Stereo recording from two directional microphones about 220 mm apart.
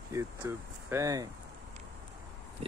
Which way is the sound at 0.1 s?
10° right (ahead or behind).